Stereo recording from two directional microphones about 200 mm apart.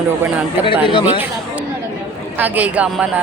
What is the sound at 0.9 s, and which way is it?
Speech, 25° left (ahead or behind).